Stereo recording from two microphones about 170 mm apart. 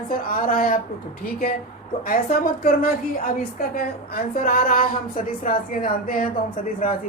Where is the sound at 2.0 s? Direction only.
55° left (ahead or behind).